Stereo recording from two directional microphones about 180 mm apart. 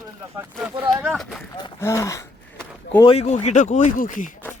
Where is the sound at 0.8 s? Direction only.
10° right (ahead or behind).